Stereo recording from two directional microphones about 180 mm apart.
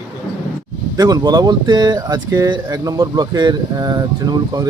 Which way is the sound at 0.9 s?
20° right (ahead or behind).